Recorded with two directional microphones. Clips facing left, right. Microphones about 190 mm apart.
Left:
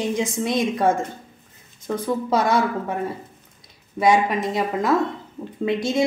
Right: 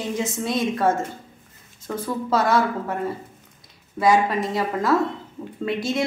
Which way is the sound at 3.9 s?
20° left (ahead or behind).